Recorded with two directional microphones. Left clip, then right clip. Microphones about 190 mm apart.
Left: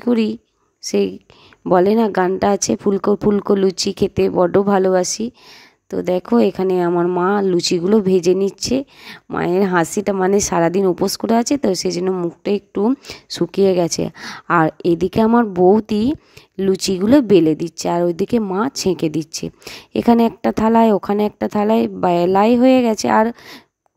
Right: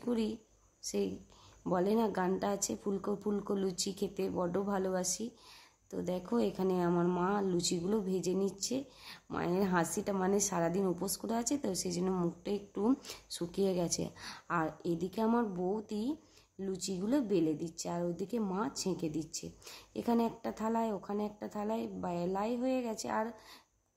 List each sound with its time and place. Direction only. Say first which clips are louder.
0.0 s speech: left 17 dB; 45° left (ahead or behind)